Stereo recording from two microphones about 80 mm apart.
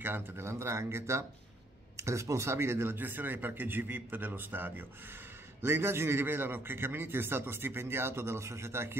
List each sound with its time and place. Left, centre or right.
0.0 s a man's voice: right